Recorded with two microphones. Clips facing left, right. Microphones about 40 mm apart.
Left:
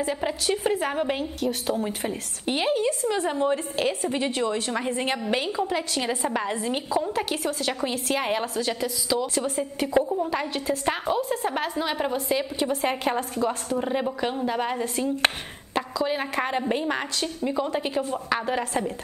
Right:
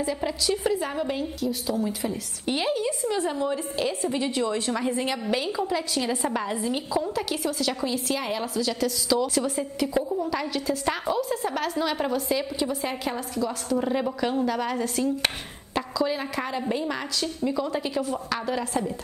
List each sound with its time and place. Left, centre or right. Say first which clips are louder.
0.4 s a woman's voice: even; left
2.4 s a woman's voice: left 2 dB; left
8.7 s a woman's voice: right 2 dB; centre; by 11.6 s left
11.6 s a woman's voice: even; left
12.6 s a woman's voice: left 4 dB; left
13.7 s a woman's voice: right 4 dB; centre; by 18.9 s left